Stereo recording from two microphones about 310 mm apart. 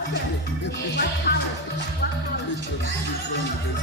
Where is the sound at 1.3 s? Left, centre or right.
Left.